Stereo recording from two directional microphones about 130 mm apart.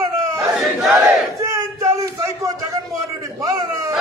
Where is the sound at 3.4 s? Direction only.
25° right (ahead or behind).